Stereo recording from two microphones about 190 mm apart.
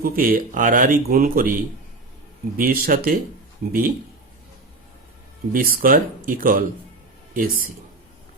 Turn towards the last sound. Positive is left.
turn(degrees=-45)  # may be behind; listen again after turning